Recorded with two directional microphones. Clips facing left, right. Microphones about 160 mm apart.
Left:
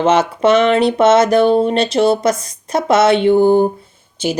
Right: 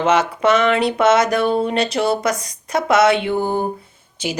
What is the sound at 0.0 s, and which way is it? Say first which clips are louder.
Speech: left 3 dB; 30° left (ahead or behind).